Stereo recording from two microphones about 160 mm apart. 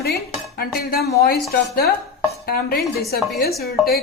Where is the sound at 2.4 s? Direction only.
70° left (ahead or behind).